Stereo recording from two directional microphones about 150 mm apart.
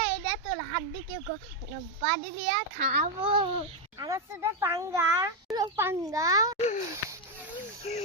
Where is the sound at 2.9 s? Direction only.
45° right (ahead or behind).